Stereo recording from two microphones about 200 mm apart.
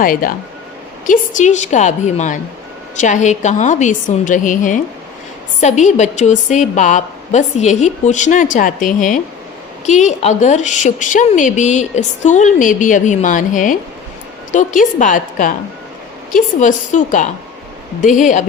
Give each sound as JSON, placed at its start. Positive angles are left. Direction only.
{"t": 0.0, "sound": "a woman's voice", "side_deg": 45}